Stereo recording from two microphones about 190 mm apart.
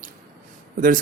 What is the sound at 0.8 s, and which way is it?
Speech, 45° right (ahead or behind).